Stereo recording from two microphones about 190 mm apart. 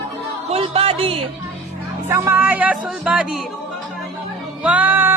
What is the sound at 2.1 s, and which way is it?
Music, 10° right (ahead or behind).